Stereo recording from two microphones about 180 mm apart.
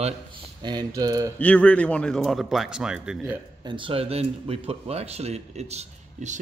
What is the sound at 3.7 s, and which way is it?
Speech, 30° right (ahead or behind).